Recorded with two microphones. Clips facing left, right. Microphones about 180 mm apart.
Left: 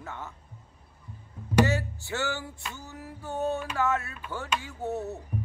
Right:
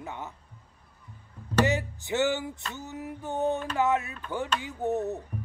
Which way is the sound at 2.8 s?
20° right (ahead or behind).